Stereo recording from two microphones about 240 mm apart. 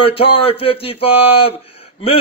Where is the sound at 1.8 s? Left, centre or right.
Left.